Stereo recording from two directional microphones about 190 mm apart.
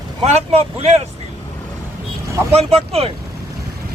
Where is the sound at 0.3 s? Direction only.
35° right (ahead or behind).